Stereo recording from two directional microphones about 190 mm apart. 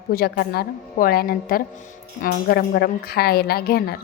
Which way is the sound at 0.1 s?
50° left (ahead or behind).